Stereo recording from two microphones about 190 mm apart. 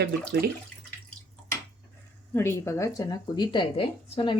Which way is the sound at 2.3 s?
15° left (ahead or behind).